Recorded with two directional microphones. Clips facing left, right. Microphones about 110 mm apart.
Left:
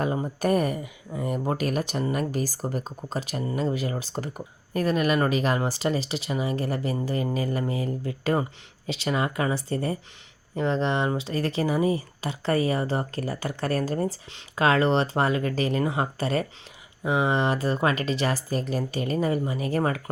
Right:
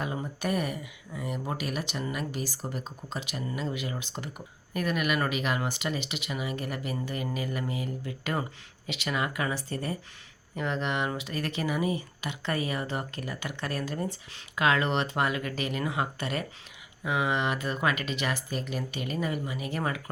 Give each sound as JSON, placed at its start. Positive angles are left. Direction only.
{"t": 0.0, "sound": "speech", "side_deg": 40}